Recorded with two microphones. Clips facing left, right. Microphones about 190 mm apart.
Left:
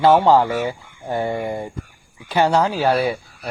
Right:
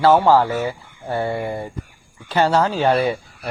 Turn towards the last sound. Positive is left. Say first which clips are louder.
# right 1 dB
turn(degrees=5)  # may be behind; listen again after turning